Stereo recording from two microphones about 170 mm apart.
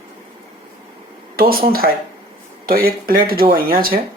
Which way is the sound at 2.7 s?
60° right (ahead or behind).